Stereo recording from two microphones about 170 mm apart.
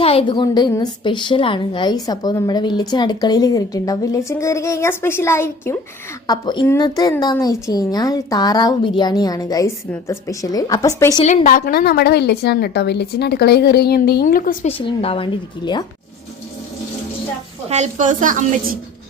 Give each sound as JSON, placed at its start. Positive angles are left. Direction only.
{"t": 0.0, "sound": "a woman's voice", "side_deg": 35}
{"t": 11.2, "sound": "speech", "side_deg": 35}
{"t": 11.4, "sound": "a woman's voice", "side_deg": 60}
{"t": 14.7, "sound": "speech", "side_deg": 30}
{"t": 17.7, "sound": "a woman's voice", "side_deg": -45}